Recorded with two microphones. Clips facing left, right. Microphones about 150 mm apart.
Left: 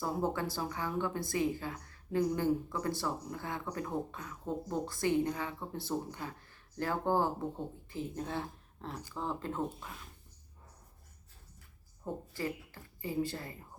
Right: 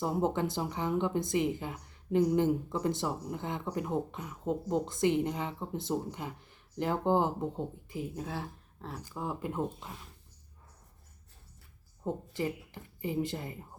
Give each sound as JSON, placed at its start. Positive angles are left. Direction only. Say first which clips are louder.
{"t": 0.0, "sound": "speech", "louder": "right 4 dB", "side_deg": -20}
{"t": 12.0, "sound": "speech", "louder": "right 4 dB", "side_deg": -20}